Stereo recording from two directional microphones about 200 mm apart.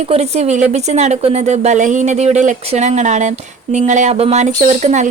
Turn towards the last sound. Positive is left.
turn(degrees=-35)  # may be behind; listen again after turning